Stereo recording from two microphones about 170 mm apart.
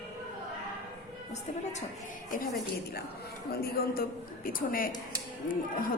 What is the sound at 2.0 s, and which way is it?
Speech, 55° left (ahead or behind).